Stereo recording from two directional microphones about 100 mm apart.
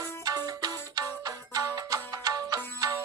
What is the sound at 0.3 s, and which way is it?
Music, 40° right (ahead or behind).